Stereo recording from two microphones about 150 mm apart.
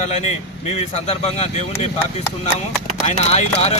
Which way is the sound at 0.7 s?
45° left (ahead or behind).